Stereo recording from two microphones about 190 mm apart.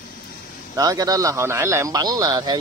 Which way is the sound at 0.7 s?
20° right (ahead or behind).